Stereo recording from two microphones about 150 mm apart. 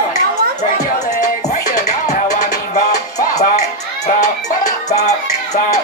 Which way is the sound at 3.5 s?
50° left (ahead or behind).